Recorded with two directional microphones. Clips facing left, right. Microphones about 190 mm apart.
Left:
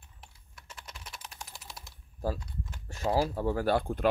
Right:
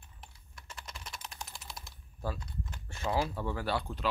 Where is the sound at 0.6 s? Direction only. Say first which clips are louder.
Right 1 dB; 5° left (ahead or behind).